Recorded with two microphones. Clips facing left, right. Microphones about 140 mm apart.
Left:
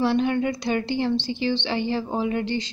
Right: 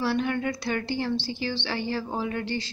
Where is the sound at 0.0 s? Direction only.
20° left (ahead or behind).